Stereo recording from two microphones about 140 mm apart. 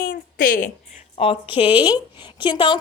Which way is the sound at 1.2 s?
40° left (ahead or behind).